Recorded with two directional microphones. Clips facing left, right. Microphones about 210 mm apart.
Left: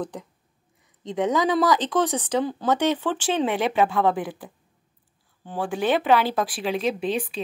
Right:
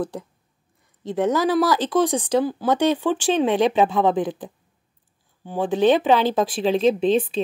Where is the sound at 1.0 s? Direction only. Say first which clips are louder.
Right 2 dB; 5° right (ahead or behind).